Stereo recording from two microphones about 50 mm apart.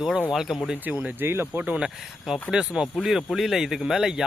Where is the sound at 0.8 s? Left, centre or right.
Right.